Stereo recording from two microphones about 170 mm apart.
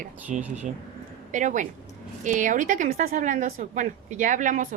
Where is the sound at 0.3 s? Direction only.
45° right (ahead or behind).